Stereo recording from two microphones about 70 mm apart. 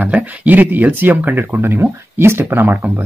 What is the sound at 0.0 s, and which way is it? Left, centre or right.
Speech, centre.